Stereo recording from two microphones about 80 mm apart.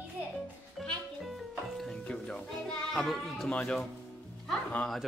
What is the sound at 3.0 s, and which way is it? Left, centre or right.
Speech, centre.